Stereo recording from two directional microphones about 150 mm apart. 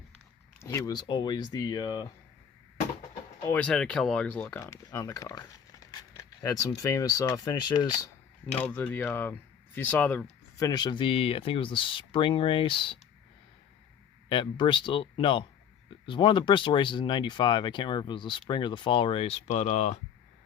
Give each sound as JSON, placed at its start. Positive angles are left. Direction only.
{"t": 0.6, "sound": "speech", "side_deg": 20}
{"t": 3.4, "sound": "speech", "side_deg": 10}
{"t": 8.6, "sound": "speech", "side_deg": 10}
{"t": 10.6, "sound": "speech", "side_deg": 25}
{"t": 14.3, "sound": "speech", "side_deg": 30}